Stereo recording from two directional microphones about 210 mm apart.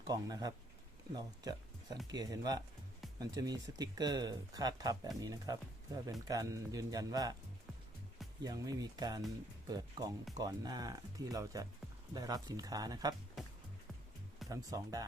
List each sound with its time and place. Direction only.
0.1 s speech: 20° right (ahead or behind)
8.4 s speech: 15° right (ahead or behind)
14.4 s speech: 15° right (ahead or behind)